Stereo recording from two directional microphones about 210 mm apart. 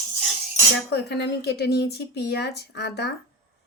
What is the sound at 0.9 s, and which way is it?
Speech, 50° left (ahead or behind).